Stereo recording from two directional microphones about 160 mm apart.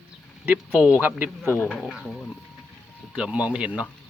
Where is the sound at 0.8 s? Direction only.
10° right (ahead or behind).